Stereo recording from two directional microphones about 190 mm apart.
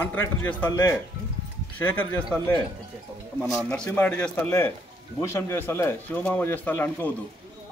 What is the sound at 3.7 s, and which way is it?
A man's voice, 10° left (ahead or behind).